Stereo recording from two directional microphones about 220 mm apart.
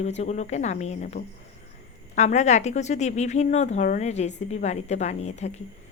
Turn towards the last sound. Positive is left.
turn(degrees=30)  # may be behind; listen again after turning